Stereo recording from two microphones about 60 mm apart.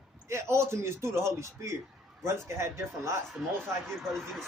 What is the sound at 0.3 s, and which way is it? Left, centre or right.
Speech, right.